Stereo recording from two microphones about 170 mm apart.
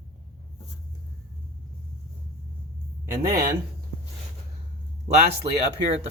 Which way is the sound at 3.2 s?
60° right (ahead or behind).